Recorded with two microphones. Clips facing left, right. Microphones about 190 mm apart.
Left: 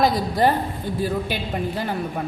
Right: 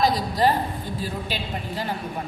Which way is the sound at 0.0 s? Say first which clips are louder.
Left 2 dB; 55° left (ahead or behind).